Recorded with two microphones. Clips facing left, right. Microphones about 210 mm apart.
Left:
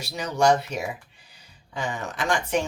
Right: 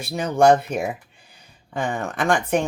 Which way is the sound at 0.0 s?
50° right (ahead or behind).